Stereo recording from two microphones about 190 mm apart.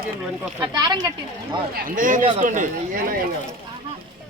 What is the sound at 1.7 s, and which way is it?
Speech, 45° right (ahead or behind).